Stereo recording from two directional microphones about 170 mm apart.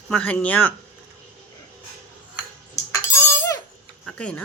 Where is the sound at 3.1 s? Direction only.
15° left (ahead or behind).